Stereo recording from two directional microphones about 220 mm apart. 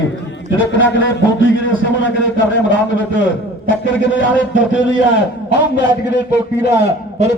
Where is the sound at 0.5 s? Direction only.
60° left (ahead or behind).